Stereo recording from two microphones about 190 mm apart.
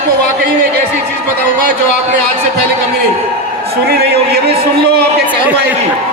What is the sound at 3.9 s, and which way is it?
A man's voice, 55° right (ahead or behind).